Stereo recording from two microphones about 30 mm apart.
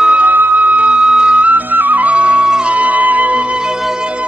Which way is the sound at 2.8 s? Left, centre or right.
Right.